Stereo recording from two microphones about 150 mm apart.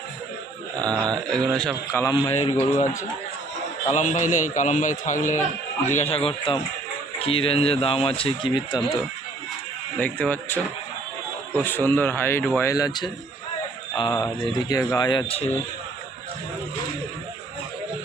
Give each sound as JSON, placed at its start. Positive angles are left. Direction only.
{"t": 0.9, "sound": "a man's voice", "side_deg": 5}
{"t": 2.1, "sound": "a man's voice", "side_deg": 45}
{"t": 5.9, "sound": "a man's voice", "side_deg": 45}
{"t": 10.0, "sound": "speech", "side_deg": 10}
{"t": 14.4, "sound": "speech", "side_deg": 25}
{"t": 15.3, "sound": "a man's voice", "side_deg": 40}